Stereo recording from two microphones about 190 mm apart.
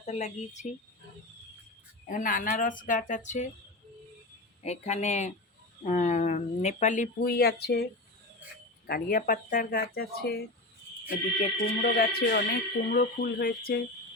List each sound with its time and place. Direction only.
0.0 s speech: 35° left (ahead or behind)
2.0 s speech: 45° left (ahead or behind)
4.6 s speech: 35° left (ahead or behind); by 7.9 s 60° left (ahead or behind)
8.9 s speech: 50° left (ahead or behind)
11.8 s speech: 50° left (ahead or behind)